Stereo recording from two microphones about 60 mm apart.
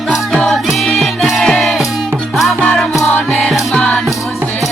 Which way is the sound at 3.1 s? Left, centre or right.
Left.